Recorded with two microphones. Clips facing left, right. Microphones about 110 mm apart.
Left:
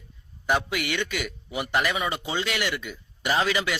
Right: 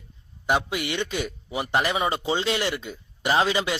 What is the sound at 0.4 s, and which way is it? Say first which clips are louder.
A man's voice: right 1 dB; 25° right (ahead or behind).